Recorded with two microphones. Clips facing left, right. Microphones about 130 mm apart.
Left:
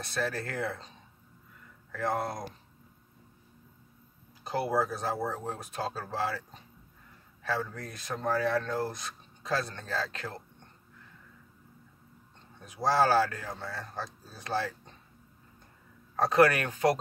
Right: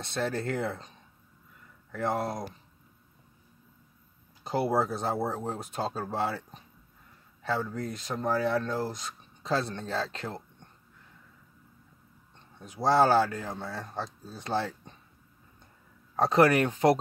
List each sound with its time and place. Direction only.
0.0 s speech: 25° right (ahead or behind)
1.9 s speech: 20° right (ahead or behind)
4.5 s speech: 25° right (ahead or behind)
7.4 s speech: 25° right (ahead or behind)
12.5 s speech: 25° right (ahead or behind)
16.2 s speech: 25° right (ahead or behind)